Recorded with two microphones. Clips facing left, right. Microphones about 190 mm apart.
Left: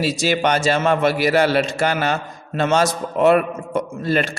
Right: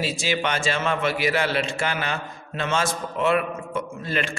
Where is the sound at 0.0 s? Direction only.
40° left (ahead or behind).